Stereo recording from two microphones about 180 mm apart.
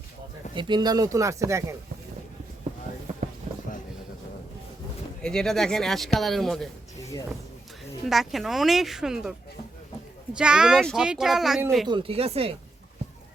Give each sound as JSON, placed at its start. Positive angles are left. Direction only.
{"t": 0.5, "sound": "speech", "side_deg": -25}
{"t": 3.5, "sound": "a sound", "side_deg": -35}
{"t": 5.2, "sound": "speech", "side_deg": 5}
{"t": 8.1, "sound": "speech", "side_deg": 0}
{"t": 10.3, "sound": "speech", "side_deg": -5}
{"t": 11.9, "sound": "speech", "side_deg": -30}